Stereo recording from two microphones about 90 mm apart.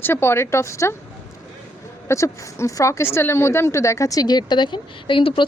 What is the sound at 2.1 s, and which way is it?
Speech, 35° left (ahead or behind).